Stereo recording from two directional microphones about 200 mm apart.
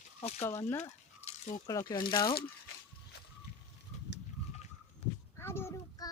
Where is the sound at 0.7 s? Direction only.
10° left (ahead or behind).